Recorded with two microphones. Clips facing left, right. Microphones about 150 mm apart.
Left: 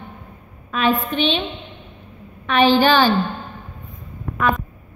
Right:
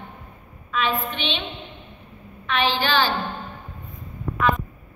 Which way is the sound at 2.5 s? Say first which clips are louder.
Left 8 dB; 50° left (ahead or behind).